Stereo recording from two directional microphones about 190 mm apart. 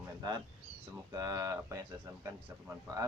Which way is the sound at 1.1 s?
20° right (ahead or behind).